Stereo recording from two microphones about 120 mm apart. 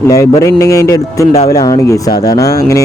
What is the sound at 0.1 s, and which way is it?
Speech, 30° left (ahead or behind).